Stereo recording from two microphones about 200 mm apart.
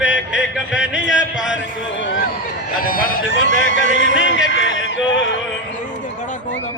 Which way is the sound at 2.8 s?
45° left (ahead or behind).